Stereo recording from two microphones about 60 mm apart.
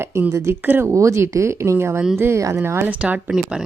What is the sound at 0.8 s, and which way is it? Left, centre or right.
Speech, right.